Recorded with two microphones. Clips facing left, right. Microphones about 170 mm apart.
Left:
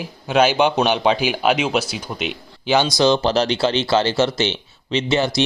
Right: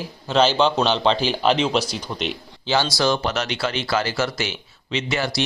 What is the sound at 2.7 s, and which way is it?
Speech, 20° left (ahead or behind).